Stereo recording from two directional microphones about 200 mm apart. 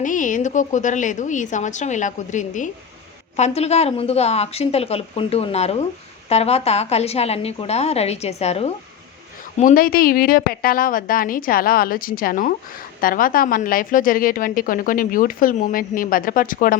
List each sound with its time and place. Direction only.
0.0 s a woman's voice: 40° left (ahead or behind)
9.6 s a woman's voice: 45° left (ahead or behind)